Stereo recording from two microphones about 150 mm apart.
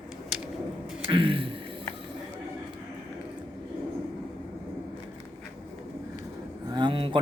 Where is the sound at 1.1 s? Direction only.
35° right (ahead or behind).